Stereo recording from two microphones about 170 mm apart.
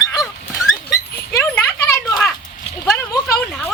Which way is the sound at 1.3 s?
10° left (ahead or behind).